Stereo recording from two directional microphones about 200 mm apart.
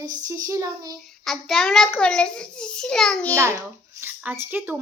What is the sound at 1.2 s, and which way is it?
A child's voice, centre (ahead or behind).